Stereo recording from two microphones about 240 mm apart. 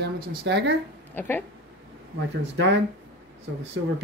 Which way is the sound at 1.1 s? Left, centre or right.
Centre.